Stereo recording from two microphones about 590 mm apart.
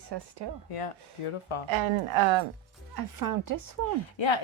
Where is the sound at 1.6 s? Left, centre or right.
Right.